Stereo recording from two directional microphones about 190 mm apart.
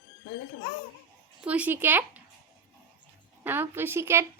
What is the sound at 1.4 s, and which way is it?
Speech, 5° right (ahead or behind).